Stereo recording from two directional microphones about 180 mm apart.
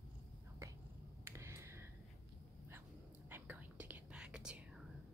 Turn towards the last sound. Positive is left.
turn(degrees=-5)  # may be behind; listen again after turning